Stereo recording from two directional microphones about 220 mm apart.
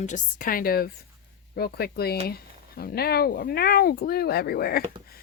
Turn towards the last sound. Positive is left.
turn(degrees=45)  # may be behind; listen again after turning